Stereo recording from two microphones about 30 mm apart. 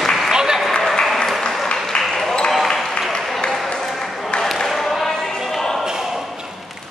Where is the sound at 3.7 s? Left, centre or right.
Centre.